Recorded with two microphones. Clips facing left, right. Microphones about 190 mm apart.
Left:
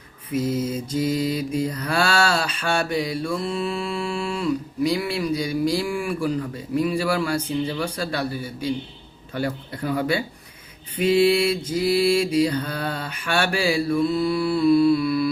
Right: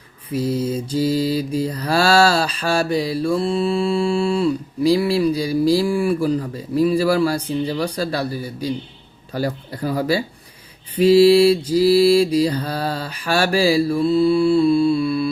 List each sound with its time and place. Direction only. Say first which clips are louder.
0.3 s mantra: right 2 dB; 30° right (ahead or behind)